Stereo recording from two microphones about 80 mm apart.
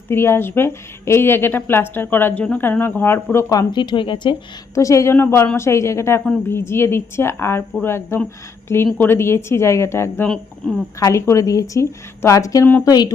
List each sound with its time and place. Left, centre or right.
0.1 s a woman's voice: left
3.7 s speech: left
4.7 s speech: left
5.1 s a woman's voice: left
10.6 s a woman's voice: centre
11.0 s speech: left